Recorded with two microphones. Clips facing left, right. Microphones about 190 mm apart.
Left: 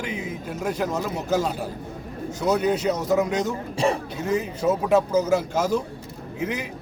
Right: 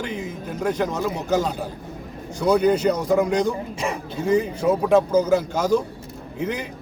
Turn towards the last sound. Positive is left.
turn(degrees=5)  # may be behind; listen again after turning